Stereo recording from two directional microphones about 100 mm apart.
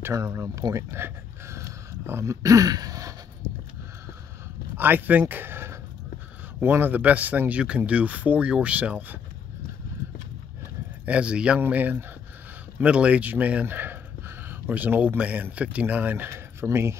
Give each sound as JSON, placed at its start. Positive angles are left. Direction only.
{"t": 0.0, "sound": "speech", "side_deg": -30}
{"t": 4.7, "sound": "speech", "side_deg": -20}
{"t": 5.3, "sound": "a sound", "side_deg": -20}
{"t": 6.6, "sound": "speech", "side_deg": -20}
{"t": 11.1, "sound": "speech", "side_deg": -10}
{"t": 16.6, "sound": "speech", "side_deg": -25}